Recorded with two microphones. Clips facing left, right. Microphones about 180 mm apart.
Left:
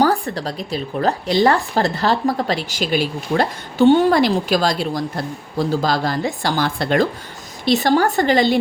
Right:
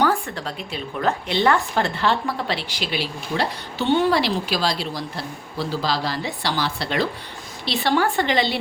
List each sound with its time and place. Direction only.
0.0 s speech: 35° left (ahead or behind)